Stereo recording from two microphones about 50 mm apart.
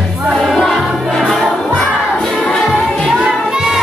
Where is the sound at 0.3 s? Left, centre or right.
Centre.